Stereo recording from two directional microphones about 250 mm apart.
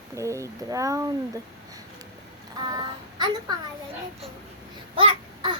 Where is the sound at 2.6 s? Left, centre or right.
Centre.